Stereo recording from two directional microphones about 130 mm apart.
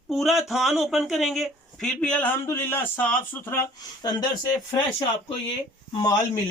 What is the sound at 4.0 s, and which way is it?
Speech, 30° left (ahead or behind).